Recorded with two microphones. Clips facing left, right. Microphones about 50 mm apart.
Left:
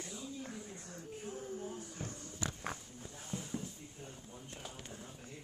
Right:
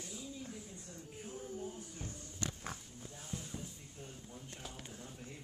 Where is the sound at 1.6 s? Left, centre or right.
Left.